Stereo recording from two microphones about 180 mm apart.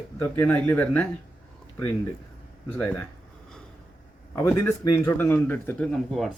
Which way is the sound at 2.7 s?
10° left (ahead or behind).